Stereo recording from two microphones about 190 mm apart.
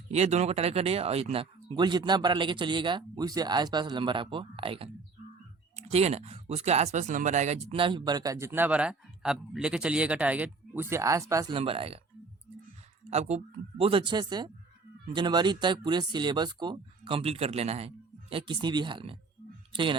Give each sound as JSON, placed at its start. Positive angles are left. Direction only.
{"t": 0.1, "sound": "speech", "side_deg": -35}
{"t": 11.5, "sound": "speech", "side_deg": -30}
{"t": 13.1, "sound": "speech", "side_deg": -35}